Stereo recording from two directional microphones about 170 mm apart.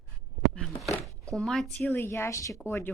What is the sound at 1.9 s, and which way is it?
Speech, 15° left (ahead or behind).